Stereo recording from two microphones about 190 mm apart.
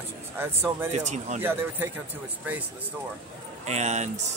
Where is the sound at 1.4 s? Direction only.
10° right (ahead or behind).